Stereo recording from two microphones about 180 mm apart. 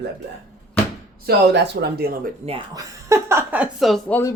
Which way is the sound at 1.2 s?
60° right (ahead or behind).